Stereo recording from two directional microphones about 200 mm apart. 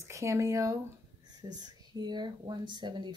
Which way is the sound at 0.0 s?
15° right (ahead or behind).